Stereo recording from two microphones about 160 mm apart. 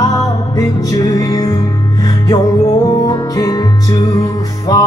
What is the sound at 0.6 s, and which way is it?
Music, 20° left (ahead or behind).